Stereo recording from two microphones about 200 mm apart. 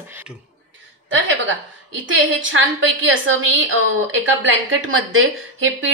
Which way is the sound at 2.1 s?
75° right (ahead or behind).